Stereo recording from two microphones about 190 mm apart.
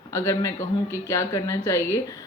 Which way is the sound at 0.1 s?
15° left (ahead or behind).